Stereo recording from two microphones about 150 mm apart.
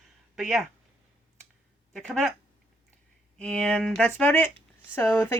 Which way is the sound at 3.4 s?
5° left (ahead or behind).